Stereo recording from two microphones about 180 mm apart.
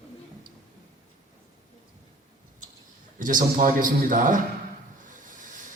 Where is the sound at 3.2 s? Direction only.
45° right (ahead or behind).